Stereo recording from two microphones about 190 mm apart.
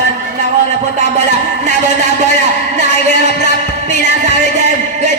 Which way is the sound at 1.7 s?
40° right (ahead or behind).